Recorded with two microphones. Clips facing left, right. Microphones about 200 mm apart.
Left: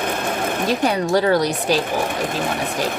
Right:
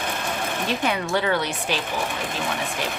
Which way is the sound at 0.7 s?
40° left (ahead or behind).